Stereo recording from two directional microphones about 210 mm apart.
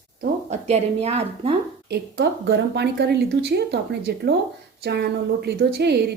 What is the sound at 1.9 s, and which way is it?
A woman's voice, 50° right (ahead or behind).